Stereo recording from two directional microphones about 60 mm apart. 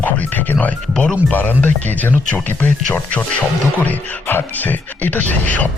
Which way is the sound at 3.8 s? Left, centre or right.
Left.